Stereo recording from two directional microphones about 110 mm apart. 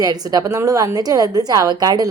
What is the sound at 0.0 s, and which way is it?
A woman's voice, 35° right (ahead or behind).